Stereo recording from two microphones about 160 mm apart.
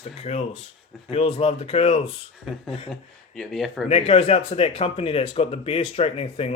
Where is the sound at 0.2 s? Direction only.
40° left (ahead or behind).